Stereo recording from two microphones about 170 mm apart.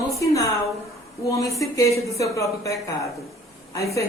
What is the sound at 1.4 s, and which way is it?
A woman's voice, 20° left (ahead or behind).